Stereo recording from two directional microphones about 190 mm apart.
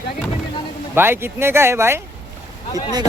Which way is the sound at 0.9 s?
10° right (ahead or behind).